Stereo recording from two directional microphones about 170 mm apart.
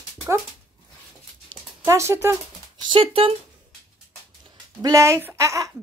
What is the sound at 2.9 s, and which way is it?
Speech, 30° right (ahead or behind).